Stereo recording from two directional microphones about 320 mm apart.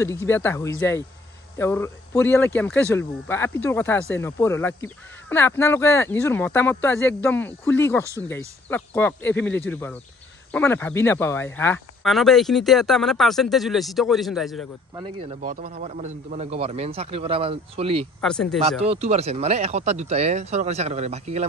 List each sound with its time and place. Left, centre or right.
0.0 s speech: centre
15.0 s a man's voice: right
18.2 s speech: centre
18.6 s a man's voice: centre